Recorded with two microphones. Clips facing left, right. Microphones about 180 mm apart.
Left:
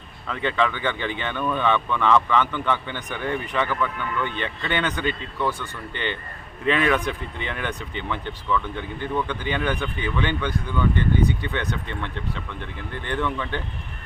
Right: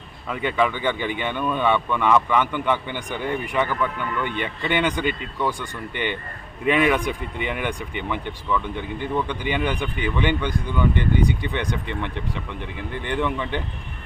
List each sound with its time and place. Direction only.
0.3 s speech: 10° right (ahead or behind)